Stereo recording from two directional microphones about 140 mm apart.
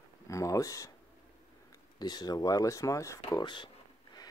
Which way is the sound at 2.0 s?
30° left (ahead or behind).